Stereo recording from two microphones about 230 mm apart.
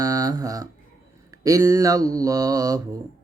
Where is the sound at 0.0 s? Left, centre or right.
Centre.